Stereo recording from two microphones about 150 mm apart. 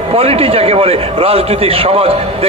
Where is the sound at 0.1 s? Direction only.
40° right (ahead or behind).